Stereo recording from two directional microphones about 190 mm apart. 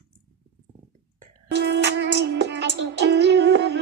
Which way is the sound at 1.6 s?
65° right (ahead or behind).